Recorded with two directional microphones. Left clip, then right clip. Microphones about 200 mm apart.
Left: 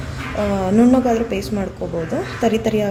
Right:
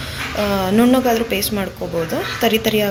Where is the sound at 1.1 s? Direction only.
40° right (ahead or behind).